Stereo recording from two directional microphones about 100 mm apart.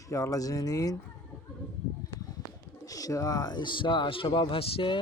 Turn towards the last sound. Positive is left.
turn(degrees=65)  # may be behind; listen again after turning